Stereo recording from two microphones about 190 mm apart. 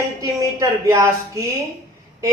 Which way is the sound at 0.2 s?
15° right (ahead or behind).